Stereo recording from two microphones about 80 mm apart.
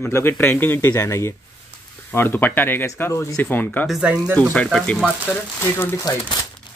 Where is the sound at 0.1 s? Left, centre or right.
Left.